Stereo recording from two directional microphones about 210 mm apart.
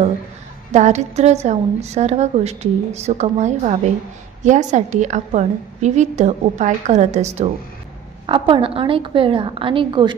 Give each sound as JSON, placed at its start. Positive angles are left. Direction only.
{"t": 0.7, "sound": "a woman's voice", "side_deg": -35}